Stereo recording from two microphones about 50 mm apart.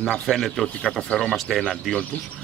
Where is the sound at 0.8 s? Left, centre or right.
Centre.